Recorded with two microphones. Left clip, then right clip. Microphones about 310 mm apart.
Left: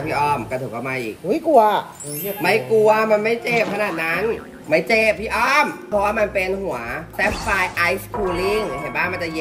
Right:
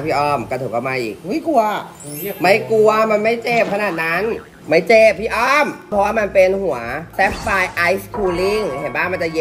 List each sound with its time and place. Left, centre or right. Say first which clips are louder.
0.0 s speech: right 3 dB; centre
1.3 s speech: left 2 dB; centre
2.4 s speech: right 3 dB; centre
8.2 s speech: right 1 dB; centre
8.9 s speech: right 2 dB; centre